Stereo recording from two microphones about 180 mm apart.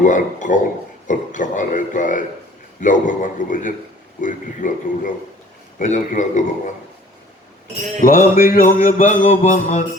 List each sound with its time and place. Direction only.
0.0 s mantra: 45° left (ahead or behind)
8.0 s mantra: 50° left (ahead or behind)